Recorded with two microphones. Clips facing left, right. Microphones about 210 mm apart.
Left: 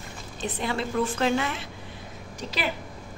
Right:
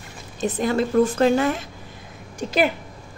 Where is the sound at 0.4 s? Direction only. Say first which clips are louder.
Right 8 dB; 45° right (ahead or behind).